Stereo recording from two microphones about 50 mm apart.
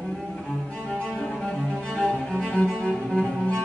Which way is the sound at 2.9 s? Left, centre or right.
Centre.